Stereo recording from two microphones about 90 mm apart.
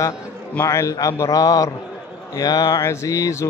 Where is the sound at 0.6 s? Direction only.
35° left (ahead or behind).